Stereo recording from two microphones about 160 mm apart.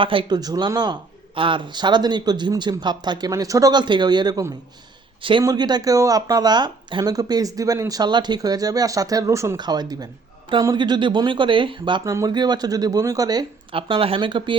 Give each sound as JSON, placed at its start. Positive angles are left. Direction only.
{"t": 0.0, "sound": "speech", "side_deg": -30}